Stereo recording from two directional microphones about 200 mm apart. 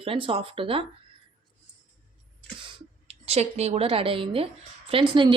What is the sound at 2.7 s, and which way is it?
A woman's voice, 30° right (ahead or behind).